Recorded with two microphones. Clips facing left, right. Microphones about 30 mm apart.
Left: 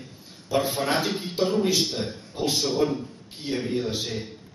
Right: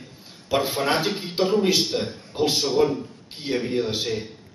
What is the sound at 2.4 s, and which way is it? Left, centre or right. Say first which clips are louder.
Speech: right 5 dB; right.